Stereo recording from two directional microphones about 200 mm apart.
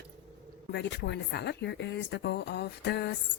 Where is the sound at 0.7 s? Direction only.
60° left (ahead or behind).